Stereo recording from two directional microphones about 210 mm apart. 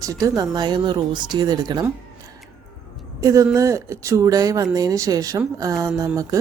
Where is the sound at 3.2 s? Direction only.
15° right (ahead or behind).